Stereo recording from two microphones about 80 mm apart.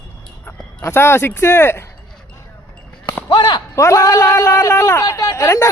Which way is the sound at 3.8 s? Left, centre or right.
Left.